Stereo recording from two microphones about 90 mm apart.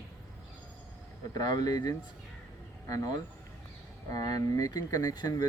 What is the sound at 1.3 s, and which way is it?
Speech, 45° left (ahead or behind).